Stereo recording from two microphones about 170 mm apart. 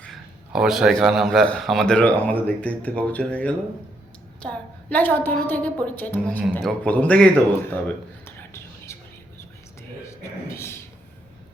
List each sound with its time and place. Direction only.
0.5 s a woman's voice: 5° right (ahead or behind)
8.4 s whispering: 15° left (ahead or behind)
10.0 s a sound: 15° left (ahead or behind)